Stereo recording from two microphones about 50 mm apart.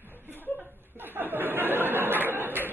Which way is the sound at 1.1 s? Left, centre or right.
Right.